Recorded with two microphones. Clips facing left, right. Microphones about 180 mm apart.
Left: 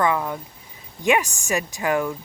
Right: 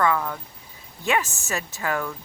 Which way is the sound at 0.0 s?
20° left (ahead or behind).